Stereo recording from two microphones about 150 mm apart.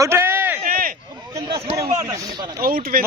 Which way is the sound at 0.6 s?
70° right (ahead or behind).